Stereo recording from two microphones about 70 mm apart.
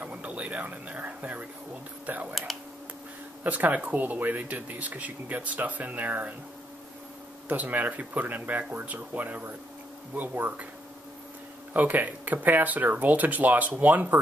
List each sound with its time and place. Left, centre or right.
0.0 s speech: centre
3.4 s speech: right
7.4 s speech: right
11.7 s speech: right